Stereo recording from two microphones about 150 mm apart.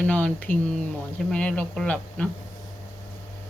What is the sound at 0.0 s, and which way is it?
Speech, 10° left (ahead or behind).